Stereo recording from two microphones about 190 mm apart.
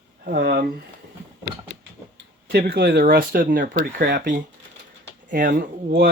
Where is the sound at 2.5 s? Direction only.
55° right (ahead or behind).